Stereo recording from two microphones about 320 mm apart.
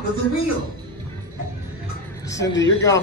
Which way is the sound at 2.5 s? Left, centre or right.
Left.